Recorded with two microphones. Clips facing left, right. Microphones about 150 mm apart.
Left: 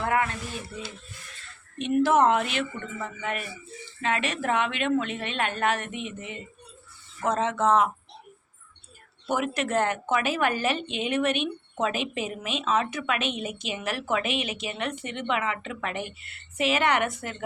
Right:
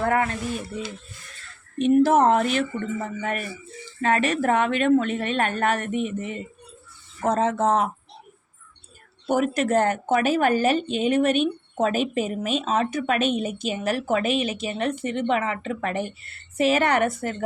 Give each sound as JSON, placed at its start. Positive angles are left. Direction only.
{"t": 0.0, "sound": "a sound", "side_deg": -40}
{"t": 1.8, "sound": "a woman's voice", "side_deg": -40}
{"t": 9.3, "sound": "a woman's voice", "side_deg": -40}